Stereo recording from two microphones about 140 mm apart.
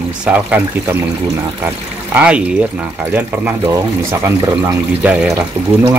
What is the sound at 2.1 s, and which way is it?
Speech, 10° right (ahead or behind).